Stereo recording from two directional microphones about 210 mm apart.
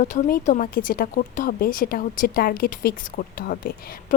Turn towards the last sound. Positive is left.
turn(degrees=45)  # may be behind; listen again after turning